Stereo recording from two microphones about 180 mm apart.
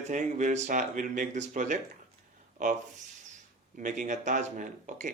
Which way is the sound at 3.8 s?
45° right (ahead or behind).